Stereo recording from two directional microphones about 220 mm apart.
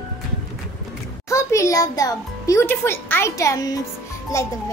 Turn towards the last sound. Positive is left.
turn(degrees=15)  # may be behind; listen again after turning